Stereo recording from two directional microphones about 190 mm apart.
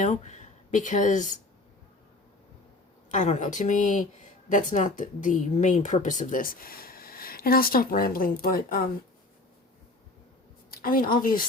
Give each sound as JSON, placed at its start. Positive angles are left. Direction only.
{"t": 0.0, "sound": "speech", "side_deg": 40}
{"t": 3.1, "sound": "a woman's voice", "side_deg": 40}
{"t": 10.7, "sound": "a woman's voice", "side_deg": 50}